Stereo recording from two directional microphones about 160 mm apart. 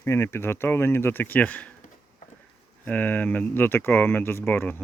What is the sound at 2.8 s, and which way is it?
Speech, 10° left (ahead or behind).